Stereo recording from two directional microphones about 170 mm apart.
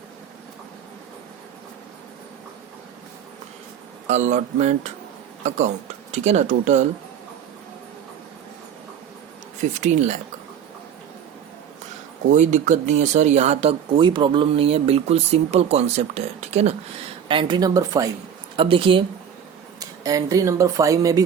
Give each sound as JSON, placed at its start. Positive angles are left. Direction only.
{"t": 4.0, "sound": "speech", "side_deg": -45}
{"t": 9.6, "sound": "speech", "side_deg": -45}
{"t": 12.3, "sound": "speech", "side_deg": -45}
{"t": 17.2, "sound": "a woman's voice", "side_deg": -30}
{"t": 18.5, "sound": "speech", "side_deg": -30}
{"t": 19.8, "sound": "speech", "side_deg": -20}